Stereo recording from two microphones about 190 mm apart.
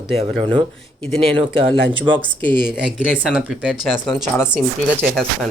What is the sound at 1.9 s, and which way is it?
Speech, 25° right (ahead or behind).